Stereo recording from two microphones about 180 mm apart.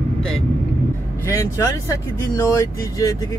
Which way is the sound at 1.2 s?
15° left (ahead or behind).